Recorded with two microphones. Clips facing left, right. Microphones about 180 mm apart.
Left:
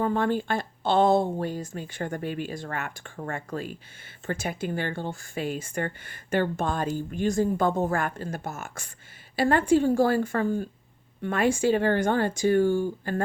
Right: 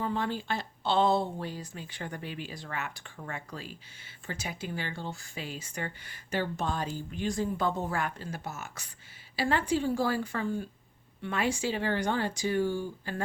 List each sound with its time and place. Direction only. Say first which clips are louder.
0.0 s speech: left 7 dB; 50° left (ahead or behind)